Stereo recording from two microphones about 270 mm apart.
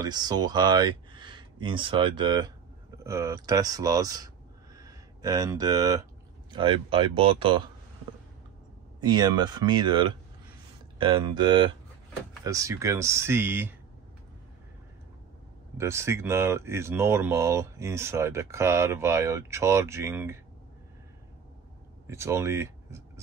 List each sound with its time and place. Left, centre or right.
0.0 s speech: centre
9.0 s speech: centre
15.8 s speech: centre
22.0 s speech: centre